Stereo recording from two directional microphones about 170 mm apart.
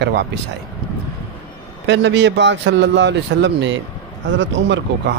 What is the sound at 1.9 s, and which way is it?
A man's voice, 90° right.